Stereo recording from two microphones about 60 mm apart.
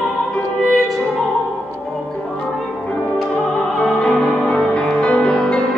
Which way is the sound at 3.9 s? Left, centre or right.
Centre.